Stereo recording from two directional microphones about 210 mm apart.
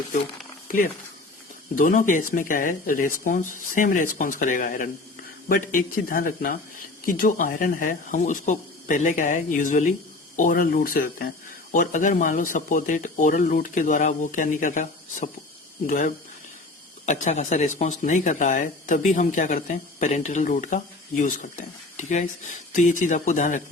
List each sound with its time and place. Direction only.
1.7 s speech: 40° left (ahead or behind)